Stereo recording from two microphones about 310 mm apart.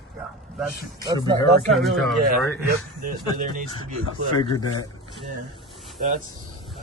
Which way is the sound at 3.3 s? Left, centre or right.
Right.